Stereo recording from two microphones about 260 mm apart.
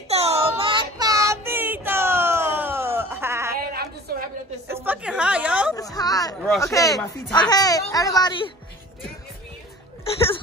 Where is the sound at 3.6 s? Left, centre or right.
Right.